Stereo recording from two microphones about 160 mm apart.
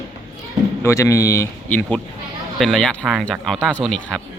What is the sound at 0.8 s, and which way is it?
Speech, 20° left (ahead or behind).